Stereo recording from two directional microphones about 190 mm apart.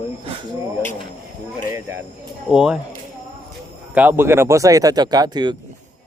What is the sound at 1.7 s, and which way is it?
Speech, 15° right (ahead or behind).